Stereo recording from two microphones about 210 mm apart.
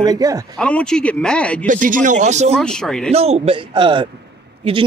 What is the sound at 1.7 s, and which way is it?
Speech, 40° right (ahead or behind).